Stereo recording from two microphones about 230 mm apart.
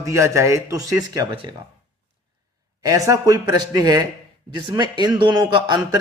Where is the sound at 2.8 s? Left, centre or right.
Centre.